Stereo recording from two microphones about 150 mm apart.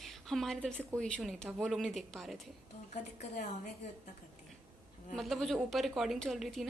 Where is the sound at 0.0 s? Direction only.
Centre (ahead or behind).